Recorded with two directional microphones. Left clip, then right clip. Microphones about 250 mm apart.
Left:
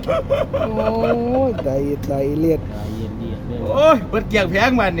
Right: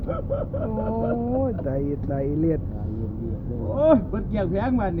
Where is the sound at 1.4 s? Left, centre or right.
Centre.